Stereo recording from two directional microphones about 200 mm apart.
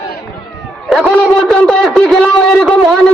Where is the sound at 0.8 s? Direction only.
Centre (ahead or behind).